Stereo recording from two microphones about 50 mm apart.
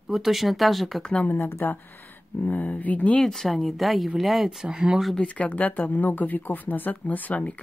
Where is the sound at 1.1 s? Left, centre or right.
Left.